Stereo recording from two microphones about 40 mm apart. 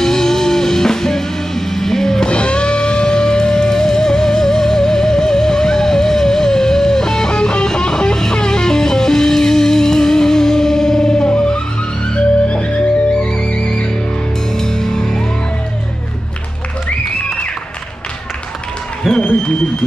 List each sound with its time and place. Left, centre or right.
0.0 s music: centre
2.2 s music: left
12.4 s music: left
14.6 s music: centre
19.1 s applause: centre